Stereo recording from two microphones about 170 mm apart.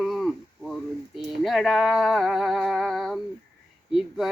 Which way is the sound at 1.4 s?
Centre (ahead or behind).